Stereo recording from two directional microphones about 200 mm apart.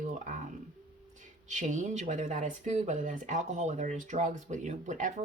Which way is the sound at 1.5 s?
40° right (ahead or behind).